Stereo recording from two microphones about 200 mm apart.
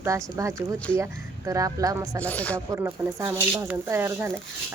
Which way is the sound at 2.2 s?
5° left (ahead or behind).